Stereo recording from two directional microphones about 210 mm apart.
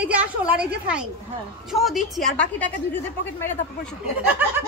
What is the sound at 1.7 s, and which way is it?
A woman's voice, centre (ahead or behind).